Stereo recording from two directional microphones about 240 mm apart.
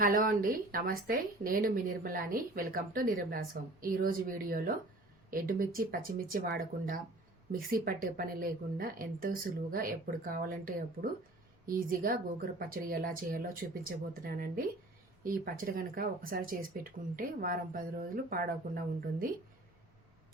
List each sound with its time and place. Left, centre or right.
0.0 s speech: right